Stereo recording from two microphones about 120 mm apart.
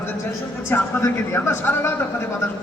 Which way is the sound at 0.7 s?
15° left (ahead or behind).